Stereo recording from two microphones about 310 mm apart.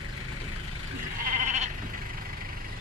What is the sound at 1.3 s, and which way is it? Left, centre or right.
Sheep, right.